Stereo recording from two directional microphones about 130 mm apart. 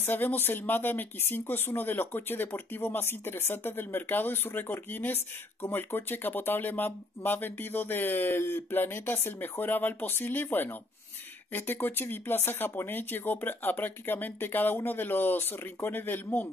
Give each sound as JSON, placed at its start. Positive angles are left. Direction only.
{"t": 0.0, "sound": "speech", "side_deg": 15}